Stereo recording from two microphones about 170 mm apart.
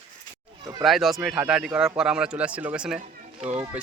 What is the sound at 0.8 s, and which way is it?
Speech, centre (ahead or behind).